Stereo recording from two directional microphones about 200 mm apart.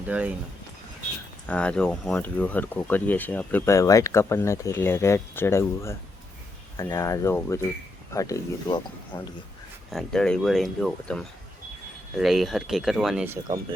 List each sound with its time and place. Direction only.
0.1 s speech: 5° right (ahead or behind)
1.5 s speech: 5° left (ahead or behind)
9.9 s speech: centre (ahead or behind)